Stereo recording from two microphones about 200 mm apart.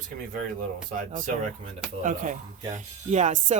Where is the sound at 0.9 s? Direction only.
40° right (ahead or behind).